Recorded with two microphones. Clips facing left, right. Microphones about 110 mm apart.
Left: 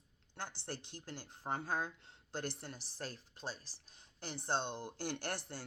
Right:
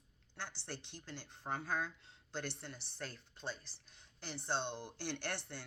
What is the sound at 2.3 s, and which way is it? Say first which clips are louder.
Speech: left 2 dB; 45° left (ahead or behind).